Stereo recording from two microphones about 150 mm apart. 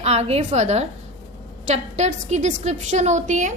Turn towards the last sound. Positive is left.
turn(degrees=-55)  # may be behind; listen again after turning